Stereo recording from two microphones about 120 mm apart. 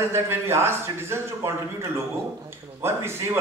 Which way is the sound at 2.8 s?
20° right (ahead or behind).